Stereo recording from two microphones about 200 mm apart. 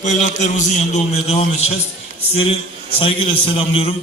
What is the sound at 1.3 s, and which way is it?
Speech, 30° left (ahead or behind).